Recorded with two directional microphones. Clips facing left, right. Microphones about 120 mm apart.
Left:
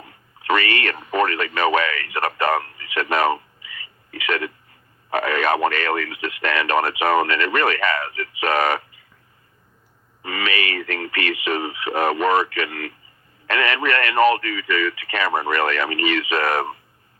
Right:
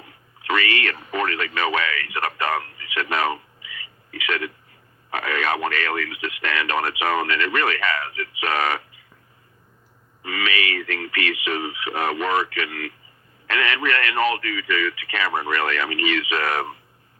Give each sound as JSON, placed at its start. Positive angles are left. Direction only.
{"t": 0.0, "sound": "speech", "side_deg": 50}
{"t": 10.2, "sound": "speech", "side_deg": 45}